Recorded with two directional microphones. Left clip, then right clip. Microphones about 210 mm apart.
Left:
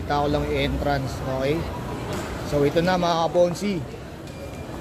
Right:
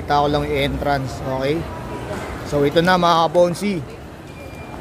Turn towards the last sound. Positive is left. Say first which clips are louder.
# right 4 dB
turn(degrees=-15)  # may be behind; listen again after turning